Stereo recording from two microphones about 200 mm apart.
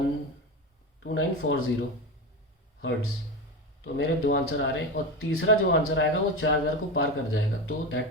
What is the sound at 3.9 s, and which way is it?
Speech, 70° left (ahead or behind).